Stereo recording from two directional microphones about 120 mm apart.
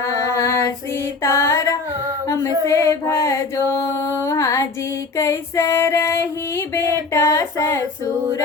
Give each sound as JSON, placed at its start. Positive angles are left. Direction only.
{"t": 0.0, "sound": "female singing", "side_deg": 25}
{"t": 3.7, "sound": "mantra", "side_deg": 25}
{"t": 5.1, "sound": "female singing", "side_deg": 25}